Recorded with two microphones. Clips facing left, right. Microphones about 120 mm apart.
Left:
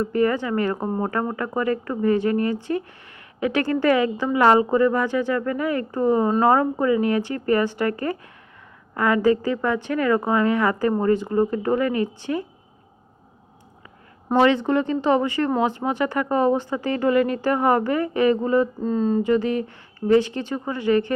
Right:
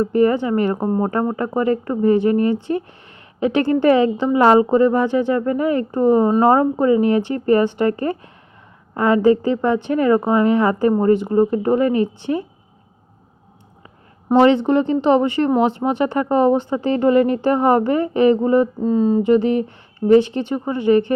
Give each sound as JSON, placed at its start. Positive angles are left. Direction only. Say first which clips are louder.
{"t": 0.0, "sound": "speech", "louder": "right 5 dB", "side_deg": -20}
{"t": 14.3, "sound": "speech", "louder": "right 5 dB", "side_deg": -20}